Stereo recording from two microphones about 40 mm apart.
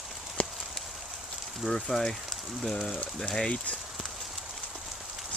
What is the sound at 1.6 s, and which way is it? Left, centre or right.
Speech, centre.